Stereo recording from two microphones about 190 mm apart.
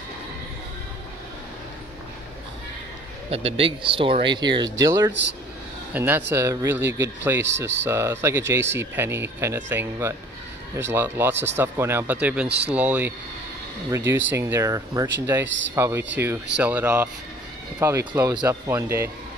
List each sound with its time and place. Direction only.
3.3 s speech: 30° right (ahead or behind)
15.4 s speech: 75° right (ahead or behind)
15.7 s speech: 15° right (ahead or behind)